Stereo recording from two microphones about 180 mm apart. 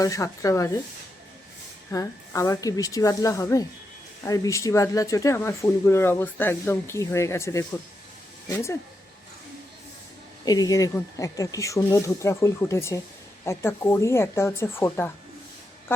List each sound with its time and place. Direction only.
0.0 s speech: 20° left (ahead or behind)
1.9 s a woman's voice: 20° left (ahead or behind)
10.4 s speech: 20° left (ahead or behind)